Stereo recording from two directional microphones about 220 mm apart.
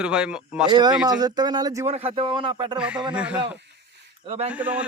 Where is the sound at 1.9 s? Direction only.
25° right (ahead or behind).